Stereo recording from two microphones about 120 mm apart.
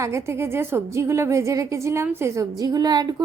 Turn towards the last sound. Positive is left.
turn(degrees=-35)  # may be behind; listen again after turning